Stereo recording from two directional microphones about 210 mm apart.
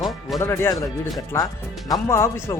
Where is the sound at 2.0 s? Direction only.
15° left (ahead or behind).